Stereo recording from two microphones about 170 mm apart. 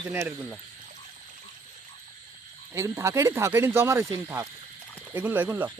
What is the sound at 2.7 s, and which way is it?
Speech, 15° right (ahead or behind).